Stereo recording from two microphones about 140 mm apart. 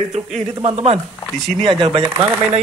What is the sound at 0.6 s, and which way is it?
Speech, 50° right (ahead or behind).